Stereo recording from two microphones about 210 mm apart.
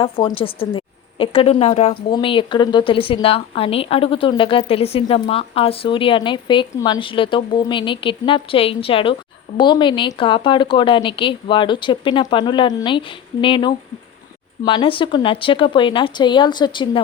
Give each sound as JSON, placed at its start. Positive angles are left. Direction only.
{"t": 0.0, "sound": "speech", "side_deg": 25}